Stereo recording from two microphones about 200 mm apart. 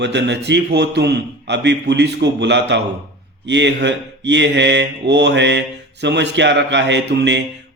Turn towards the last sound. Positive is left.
turn(degrees=-60)  # may be behind; listen again after turning